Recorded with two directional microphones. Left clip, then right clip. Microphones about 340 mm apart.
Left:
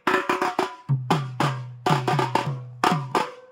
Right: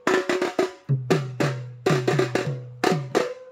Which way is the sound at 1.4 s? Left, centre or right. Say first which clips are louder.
Even; left.